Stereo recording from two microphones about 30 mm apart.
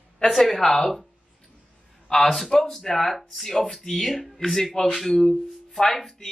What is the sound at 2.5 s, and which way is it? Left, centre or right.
Speech, centre.